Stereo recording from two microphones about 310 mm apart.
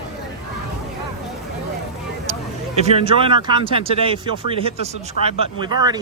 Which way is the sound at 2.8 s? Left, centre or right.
Centre.